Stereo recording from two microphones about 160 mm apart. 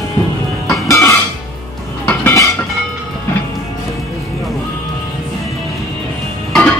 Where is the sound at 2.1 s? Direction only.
20° left (ahead or behind).